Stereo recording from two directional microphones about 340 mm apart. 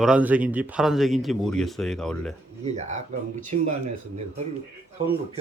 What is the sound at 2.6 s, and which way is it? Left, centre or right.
Speech, centre.